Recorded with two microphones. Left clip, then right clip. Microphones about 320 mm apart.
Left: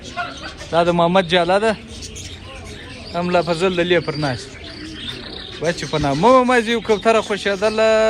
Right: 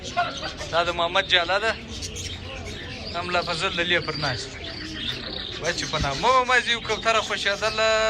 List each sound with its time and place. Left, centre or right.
0.7 s speech: centre
3.2 s speech: centre
5.9 s speech: centre